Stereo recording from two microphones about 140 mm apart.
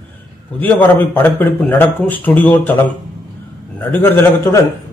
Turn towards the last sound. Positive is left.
turn(degrees=15)  # may be behind; listen again after turning